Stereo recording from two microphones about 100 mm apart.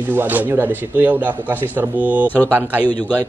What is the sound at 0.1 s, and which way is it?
A man's voice, 20° right (ahead or behind).